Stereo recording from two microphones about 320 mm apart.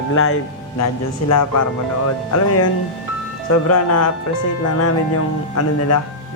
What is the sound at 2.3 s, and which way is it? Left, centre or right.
Speech, left.